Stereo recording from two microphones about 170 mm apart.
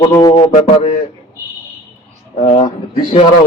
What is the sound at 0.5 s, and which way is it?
Speech, 35° left (ahead or behind).